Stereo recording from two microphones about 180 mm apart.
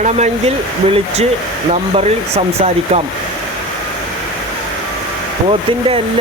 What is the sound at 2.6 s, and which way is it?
Speech, 35° right (ahead or behind).